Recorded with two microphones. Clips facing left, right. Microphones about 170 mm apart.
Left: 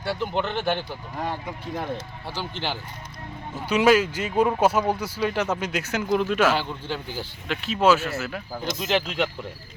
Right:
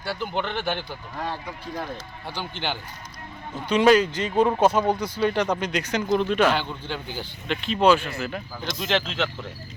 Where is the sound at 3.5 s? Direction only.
5° left (ahead or behind).